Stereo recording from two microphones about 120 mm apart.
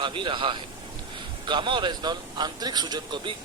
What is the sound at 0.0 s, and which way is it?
A man's voice, 40° right (ahead or behind).